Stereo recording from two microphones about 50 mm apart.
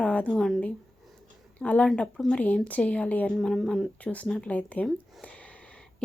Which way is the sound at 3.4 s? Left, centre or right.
Centre.